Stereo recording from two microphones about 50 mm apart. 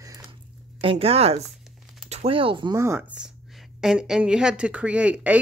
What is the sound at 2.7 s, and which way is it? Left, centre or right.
Speech, right.